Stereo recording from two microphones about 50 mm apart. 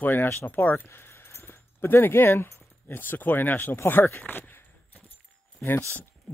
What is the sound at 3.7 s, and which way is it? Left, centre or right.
Speech, left.